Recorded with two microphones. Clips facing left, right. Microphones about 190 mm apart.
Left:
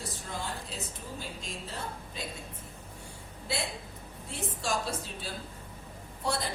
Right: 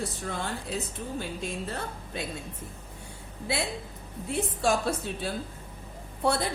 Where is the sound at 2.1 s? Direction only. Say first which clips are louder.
Right 7 dB; 60° right (ahead or behind).